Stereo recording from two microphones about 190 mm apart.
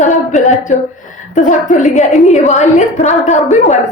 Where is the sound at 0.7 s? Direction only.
40° left (ahead or behind).